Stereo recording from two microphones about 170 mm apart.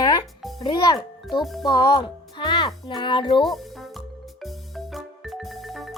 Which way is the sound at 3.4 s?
Centre (ahead or behind).